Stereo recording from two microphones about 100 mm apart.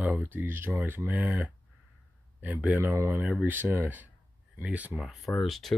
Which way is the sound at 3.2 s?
15° right (ahead or behind).